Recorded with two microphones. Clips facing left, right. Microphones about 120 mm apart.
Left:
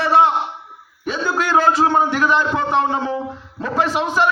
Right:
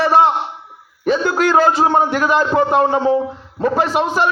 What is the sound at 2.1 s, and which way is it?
A man's voice, 40° right (ahead or behind).